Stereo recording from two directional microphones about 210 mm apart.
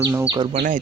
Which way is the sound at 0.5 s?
40° right (ahead or behind).